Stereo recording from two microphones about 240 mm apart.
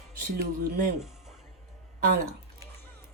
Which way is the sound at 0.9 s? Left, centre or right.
Centre.